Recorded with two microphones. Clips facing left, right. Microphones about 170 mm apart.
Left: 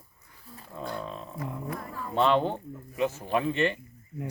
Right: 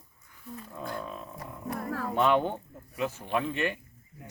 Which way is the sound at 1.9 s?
75° right (ahead or behind).